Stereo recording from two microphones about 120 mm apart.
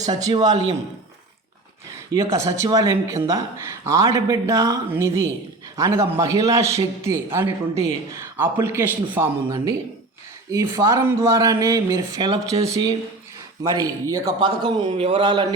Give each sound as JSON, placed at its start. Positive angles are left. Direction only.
{"t": 0.0, "sound": "a man's voice", "side_deg": -30}
{"t": 2.1, "sound": "speech", "side_deg": -30}
{"t": 14.3, "sound": "a man's voice", "side_deg": -40}
{"t": 14.8, "sound": "speech", "side_deg": -55}